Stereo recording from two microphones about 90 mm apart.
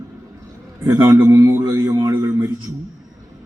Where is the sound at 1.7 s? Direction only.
45° right (ahead or behind).